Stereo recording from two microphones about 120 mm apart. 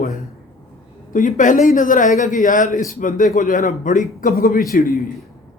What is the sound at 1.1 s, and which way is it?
A man's voice, 90° left.